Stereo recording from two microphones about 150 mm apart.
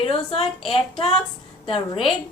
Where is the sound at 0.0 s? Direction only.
40° left (ahead or behind).